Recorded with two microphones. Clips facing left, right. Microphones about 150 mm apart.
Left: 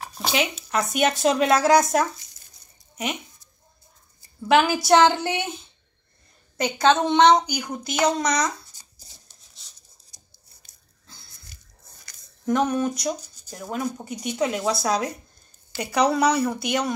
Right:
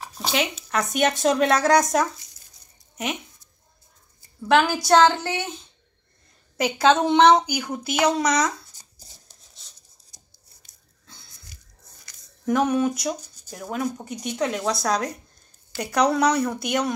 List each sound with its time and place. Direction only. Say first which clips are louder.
0.7 s speech: even; 5° left (ahead or behind)
4.5 s a woman's voice: left 1 dB; 10° left (ahead or behind)
6.5 s speech: right 1 dB; 5° right (ahead or behind)
12.4 s speech: right 1 dB; 5° right (ahead or behind)